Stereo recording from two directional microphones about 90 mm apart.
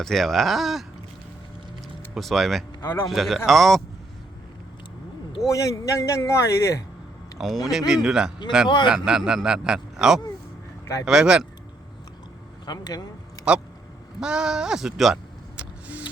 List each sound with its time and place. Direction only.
0.0 s speech: 5° left (ahead or behind)
2.1 s speech: centre (ahead or behind)
2.8 s speech: 25° left (ahead or behind)
3.1 s speech: centre (ahead or behind)
5.5 s a man's voice: 40° left (ahead or behind)
7.3 s speech: centre (ahead or behind)
12.6 s speech: 50° left (ahead or behind)
14.2 s speech: 10° right (ahead or behind)